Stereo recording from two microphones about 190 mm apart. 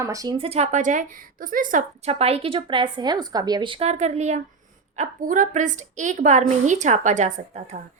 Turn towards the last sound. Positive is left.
turn(degrees=-40)  # may be behind; listen again after turning